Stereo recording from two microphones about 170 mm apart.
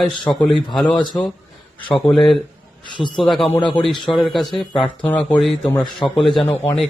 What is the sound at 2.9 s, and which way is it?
Speech, 30° left (ahead or behind).